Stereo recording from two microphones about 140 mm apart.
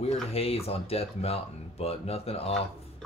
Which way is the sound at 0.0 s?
45° left (ahead or behind).